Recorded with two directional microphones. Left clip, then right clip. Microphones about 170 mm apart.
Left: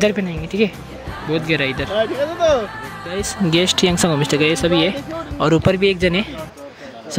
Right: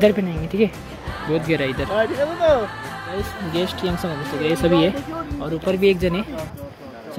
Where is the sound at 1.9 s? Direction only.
50° left (ahead or behind).